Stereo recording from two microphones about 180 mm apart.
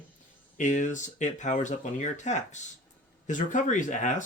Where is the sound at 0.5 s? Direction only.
45° left (ahead or behind).